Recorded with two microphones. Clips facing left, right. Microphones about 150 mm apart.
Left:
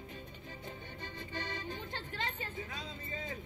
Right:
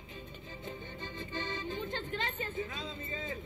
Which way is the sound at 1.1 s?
25° right (ahead or behind).